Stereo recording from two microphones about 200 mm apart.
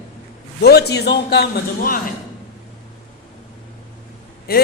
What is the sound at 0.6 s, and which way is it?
Speech, 55° left (ahead or behind).